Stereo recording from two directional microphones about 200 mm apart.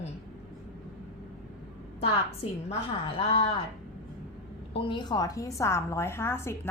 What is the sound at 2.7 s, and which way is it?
Speech, 30° left (ahead or behind).